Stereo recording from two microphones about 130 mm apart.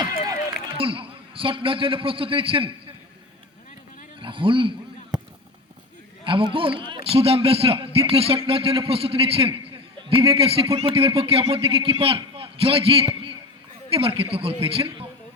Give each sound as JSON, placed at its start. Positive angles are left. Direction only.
{"t": 0.8, "sound": "a man's voice", "side_deg": -45}
{"t": 4.2, "sound": "speech", "side_deg": -40}
{"t": 6.2, "sound": "a man's voice", "side_deg": -40}
{"t": 13.1, "sound": "a sound", "side_deg": -40}
{"t": 13.9, "sound": "a man's voice", "side_deg": -45}